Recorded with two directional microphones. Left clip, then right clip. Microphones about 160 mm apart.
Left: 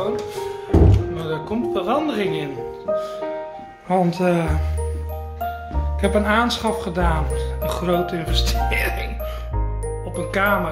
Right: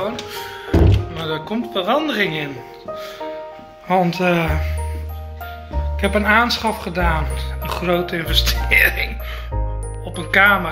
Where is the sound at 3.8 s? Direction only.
10° left (ahead or behind).